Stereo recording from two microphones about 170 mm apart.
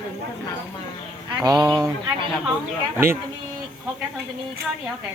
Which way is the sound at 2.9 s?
15° right (ahead or behind).